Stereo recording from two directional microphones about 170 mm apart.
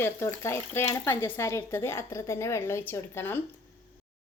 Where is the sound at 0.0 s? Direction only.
15° left (ahead or behind).